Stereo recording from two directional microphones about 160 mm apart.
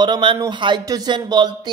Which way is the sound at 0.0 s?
30° right (ahead or behind).